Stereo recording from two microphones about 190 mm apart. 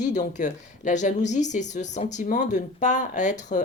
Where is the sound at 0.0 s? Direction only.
40° left (ahead or behind).